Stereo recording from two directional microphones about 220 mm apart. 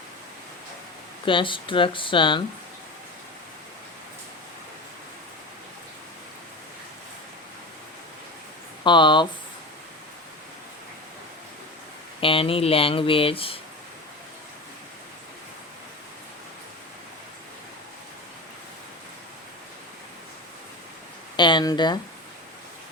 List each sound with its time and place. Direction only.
1.2 s speech: 20° left (ahead or behind)
8.8 s speech: 20° left (ahead or behind)
12.2 s speech: 25° left (ahead or behind)
21.3 s speech: 20° left (ahead or behind)